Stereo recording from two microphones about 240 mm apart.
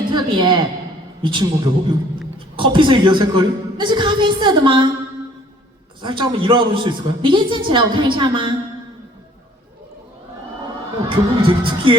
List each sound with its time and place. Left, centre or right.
0.1 s a woman's voice: centre
6.0 s a man's voice: centre
11.1 s a man's voice: right